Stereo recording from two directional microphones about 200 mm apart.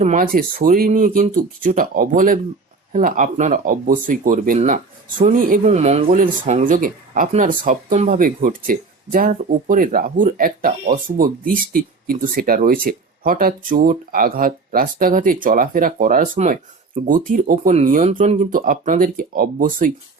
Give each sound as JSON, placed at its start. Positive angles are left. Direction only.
{"t": 0.0, "sound": "speech", "side_deg": -40}
{"t": 16.3, "sound": "speech", "side_deg": -30}